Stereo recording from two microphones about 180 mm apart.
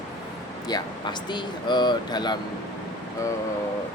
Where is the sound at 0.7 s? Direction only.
25° left (ahead or behind).